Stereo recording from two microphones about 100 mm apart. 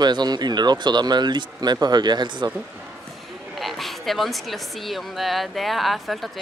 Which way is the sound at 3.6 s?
Centre (ahead or behind).